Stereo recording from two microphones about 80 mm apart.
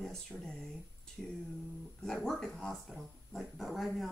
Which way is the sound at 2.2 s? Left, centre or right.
Centre.